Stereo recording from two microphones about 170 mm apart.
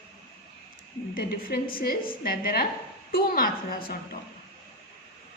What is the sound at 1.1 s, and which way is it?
A woman's voice, 60° left (ahead or behind).